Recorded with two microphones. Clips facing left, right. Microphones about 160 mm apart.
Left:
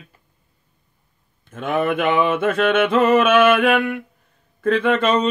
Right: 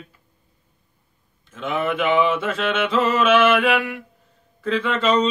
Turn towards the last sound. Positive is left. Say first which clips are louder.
# left 2 dB
turn(degrees=55)  # may be behind; listen again after turning